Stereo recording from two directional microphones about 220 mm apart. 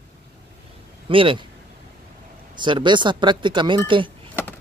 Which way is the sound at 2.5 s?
20° right (ahead or behind).